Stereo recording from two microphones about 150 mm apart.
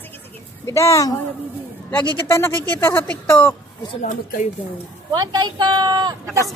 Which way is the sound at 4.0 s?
60° left (ahead or behind).